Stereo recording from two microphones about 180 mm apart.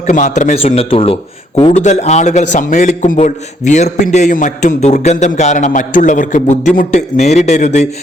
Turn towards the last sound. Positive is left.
turn(degrees=40)  # may be behind; listen again after turning